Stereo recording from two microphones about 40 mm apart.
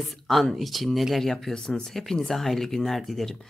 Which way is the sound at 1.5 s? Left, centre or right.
Centre.